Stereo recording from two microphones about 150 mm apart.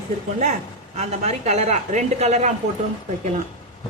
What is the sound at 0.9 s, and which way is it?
A woman's voice, 45° right (ahead or behind).